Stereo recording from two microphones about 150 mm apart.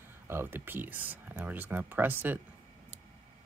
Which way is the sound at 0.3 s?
15° right (ahead or behind).